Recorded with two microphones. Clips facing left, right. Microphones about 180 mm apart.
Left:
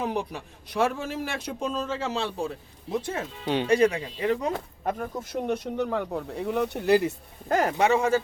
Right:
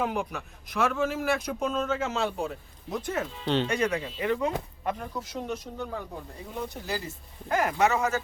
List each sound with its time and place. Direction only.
0.0 s speech: 35° left (ahead or behind)
3.4 s speech: 10° left (ahead or behind)
3.7 s speech: 35° left (ahead or behind); by 7.1 s 65° left (ahead or behind)
7.4 s speech: 35° left (ahead or behind)